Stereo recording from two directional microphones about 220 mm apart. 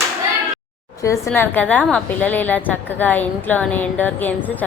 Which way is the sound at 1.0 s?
15° left (ahead or behind).